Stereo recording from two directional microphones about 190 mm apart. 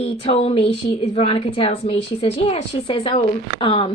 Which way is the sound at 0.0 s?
30° left (ahead or behind).